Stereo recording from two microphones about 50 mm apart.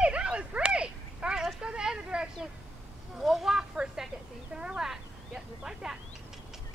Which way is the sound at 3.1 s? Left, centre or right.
Centre.